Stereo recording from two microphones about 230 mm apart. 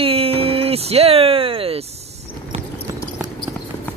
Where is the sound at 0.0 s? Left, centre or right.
Right.